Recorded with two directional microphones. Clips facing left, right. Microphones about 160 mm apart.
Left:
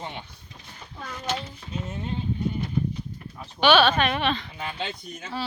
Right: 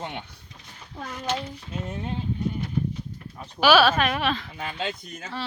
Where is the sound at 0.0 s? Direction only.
70° right (ahead or behind).